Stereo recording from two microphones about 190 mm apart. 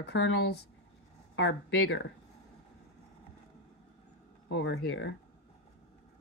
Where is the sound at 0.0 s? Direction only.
65° left (ahead or behind).